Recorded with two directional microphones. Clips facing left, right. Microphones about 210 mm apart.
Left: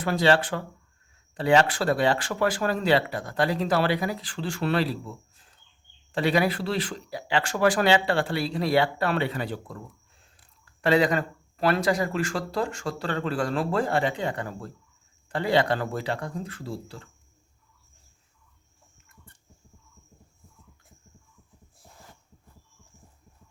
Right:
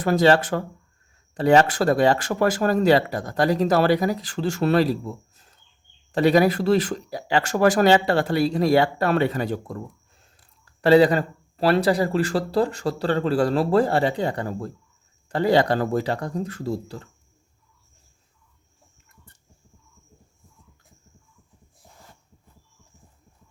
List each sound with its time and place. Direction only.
0.0 s speech: 45° right (ahead or behind)